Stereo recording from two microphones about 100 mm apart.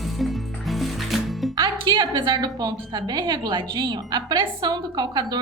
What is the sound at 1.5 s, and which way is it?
A woman's voice, 50° right (ahead or behind).